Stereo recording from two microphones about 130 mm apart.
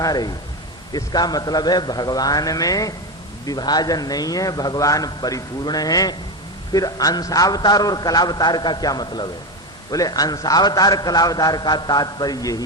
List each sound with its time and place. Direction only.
0.0 s a man's voice: 30° left (ahead or behind)